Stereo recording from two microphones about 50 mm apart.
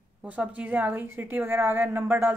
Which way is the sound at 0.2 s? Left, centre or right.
Right.